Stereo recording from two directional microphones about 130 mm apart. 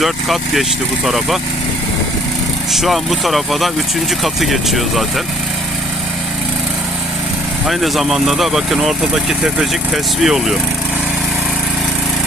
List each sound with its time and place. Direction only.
0.0 s speech: centre (ahead or behind)
2.7 s speech: centre (ahead or behind)
7.7 s speech: centre (ahead or behind)